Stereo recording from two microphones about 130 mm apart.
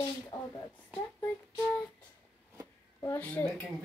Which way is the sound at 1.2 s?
10° left (ahead or behind).